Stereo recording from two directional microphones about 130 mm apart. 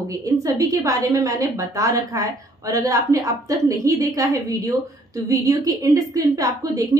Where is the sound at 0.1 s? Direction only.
25° right (ahead or behind).